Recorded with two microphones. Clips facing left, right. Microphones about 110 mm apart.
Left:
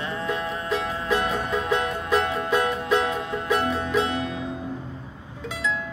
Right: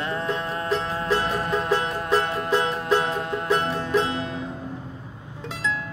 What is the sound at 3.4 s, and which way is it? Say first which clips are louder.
Music: left 1 dB; 35° right (ahead or behind).